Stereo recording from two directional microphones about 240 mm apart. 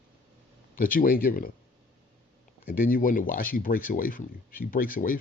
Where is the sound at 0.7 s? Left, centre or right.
Left.